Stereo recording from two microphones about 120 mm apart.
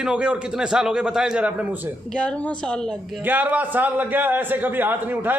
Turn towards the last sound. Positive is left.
turn(degrees=-15)  # may be behind; listen again after turning